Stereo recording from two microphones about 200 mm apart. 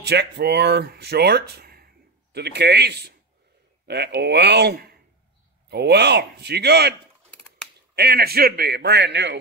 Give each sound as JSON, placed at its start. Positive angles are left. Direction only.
{"t": 0.0, "sound": "a man's voice", "side_deg": -55}